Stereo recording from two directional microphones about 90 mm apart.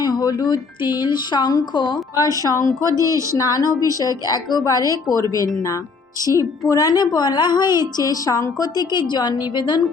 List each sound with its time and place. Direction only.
0.0 s a woman's voice: 45° left (ahead or behind)
2.9 s speech: 35° right (ahead or behind)
3.3 s a woman's voice: 40° left (ahead or behind)
3.8 s a woman's voice: 45° right (ahead or behind)
4.3 s a woman's voice: 45° left (ahead or behind)
6.7 s a woman's voice: 45° left (ahead or behind)